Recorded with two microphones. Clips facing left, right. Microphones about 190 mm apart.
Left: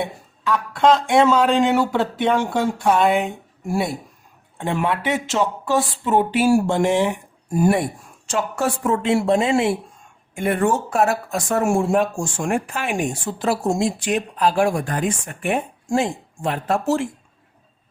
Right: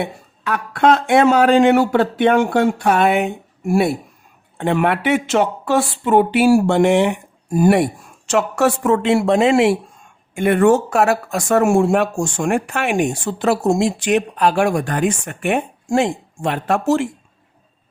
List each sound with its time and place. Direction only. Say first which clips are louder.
0.0 s speech: right 1 dB; 65° right (ahead or behind)